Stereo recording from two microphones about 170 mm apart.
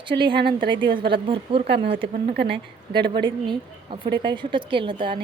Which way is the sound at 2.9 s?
30° right (ahead or behind).